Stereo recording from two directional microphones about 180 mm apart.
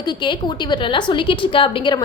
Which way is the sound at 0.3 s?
25° left (ahead or behind).